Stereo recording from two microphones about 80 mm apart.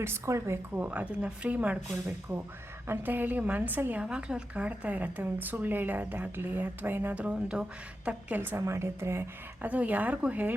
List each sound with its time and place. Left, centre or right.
0.0 s a woman's voice: right
0.8 s speech: centre
2.8 s a woman's voice: right
4.0 s a woman's voice: centre
8.4 s a woman's voice: right
9.6 s a woman's voice: centre